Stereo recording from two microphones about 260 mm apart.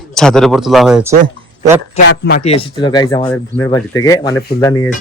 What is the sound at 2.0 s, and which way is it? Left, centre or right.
Speech, left.